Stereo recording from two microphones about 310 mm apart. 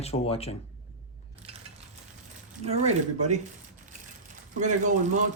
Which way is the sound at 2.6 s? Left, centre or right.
Right.